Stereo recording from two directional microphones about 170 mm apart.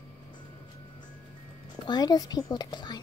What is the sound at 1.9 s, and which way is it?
A child's voice, 25° left (ahead or behind).